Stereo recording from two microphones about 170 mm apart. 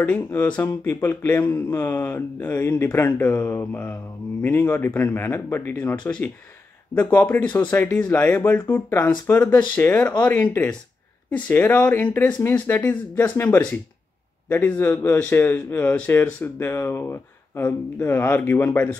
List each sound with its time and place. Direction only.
0.0 s a man's voice: 10° left (ahead or behind)